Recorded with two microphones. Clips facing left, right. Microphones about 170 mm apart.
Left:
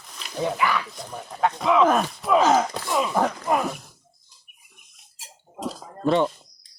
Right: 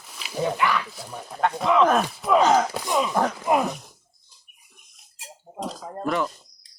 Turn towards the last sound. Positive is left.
turn(degrees=30)  # may be behind; listen again after turning